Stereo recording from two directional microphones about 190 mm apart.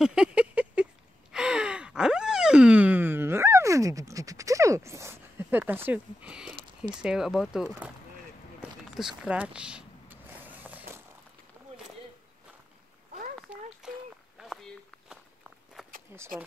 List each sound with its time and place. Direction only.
0.0 s a sound: 5° right (ahead or behind)
1.3 s gasp: 5° right (ahead or behind)
7.0 s speech: 5° right (ahead or behind)
8.9 s vehicle: 5° right (ahead or behind)
13.4 s walk: 5° right (ahead or behind)
16.1 s a sound: 10° right (ahead or behind)